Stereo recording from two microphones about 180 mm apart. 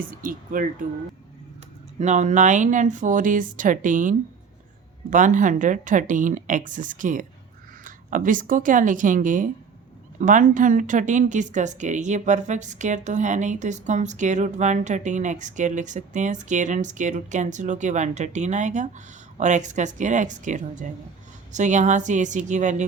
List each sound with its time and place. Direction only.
0.0 s a woman's voice: 50° right (ahead or behind)
2.0 s a woman's voice: 40° right (ahead or behind)
5.1 s a woman's voice: 45° right (ahead or behind)